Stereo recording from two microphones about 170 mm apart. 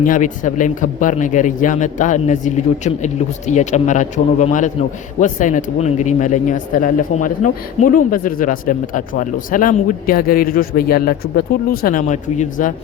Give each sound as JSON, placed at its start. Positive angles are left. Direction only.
{"t": 0.0, "sound": "speech", "side_deg": 50}